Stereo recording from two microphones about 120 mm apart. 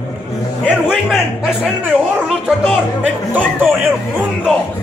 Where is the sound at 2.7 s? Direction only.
15° right (ahead or behind).